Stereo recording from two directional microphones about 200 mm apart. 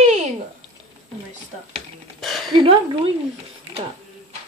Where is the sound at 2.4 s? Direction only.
25° right (ahead or behind).